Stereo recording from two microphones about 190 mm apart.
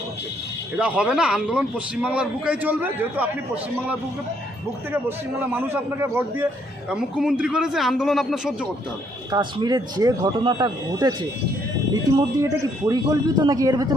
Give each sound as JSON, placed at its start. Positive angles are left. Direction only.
{"t": 0.8, "sound": "a man's voice", "side_deg": -5}
{"t": 4.9, "sound": "a man's voice", "side_deg": -10}
{"t": 9.3, "sound": "speech", "side_deg": -20}
{"t": 12.4, "sound": "speech", "side_deg": -20}